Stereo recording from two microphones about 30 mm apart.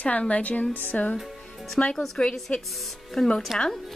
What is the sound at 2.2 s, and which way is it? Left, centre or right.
Speech, left.